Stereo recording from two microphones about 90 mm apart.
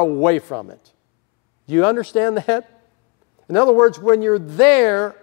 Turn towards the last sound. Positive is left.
turn(degrees=20)  # may be behind; listen again after turning